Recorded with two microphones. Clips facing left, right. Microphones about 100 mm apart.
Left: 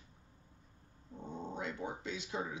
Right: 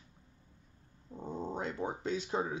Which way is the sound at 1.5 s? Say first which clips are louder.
Right 3 dB; 40° right (ahead or behind).